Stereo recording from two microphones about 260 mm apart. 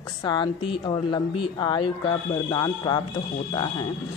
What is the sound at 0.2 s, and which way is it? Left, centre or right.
Speech, centre.